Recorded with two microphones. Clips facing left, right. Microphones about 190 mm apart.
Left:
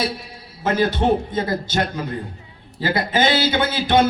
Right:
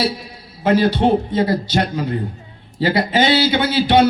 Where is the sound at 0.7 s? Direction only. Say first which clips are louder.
Right 4 dB; 50° left (ahead or behind).